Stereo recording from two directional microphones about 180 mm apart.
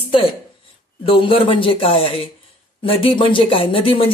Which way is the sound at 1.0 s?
30° left (ahead or behind).